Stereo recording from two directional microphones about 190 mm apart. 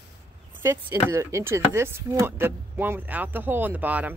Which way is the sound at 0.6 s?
15° right (ahead or behind).